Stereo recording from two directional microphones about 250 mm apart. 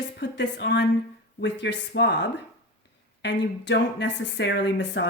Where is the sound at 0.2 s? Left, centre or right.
Left.